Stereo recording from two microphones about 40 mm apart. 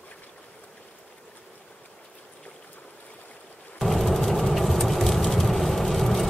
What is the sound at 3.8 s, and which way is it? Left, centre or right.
Vehicle, centre.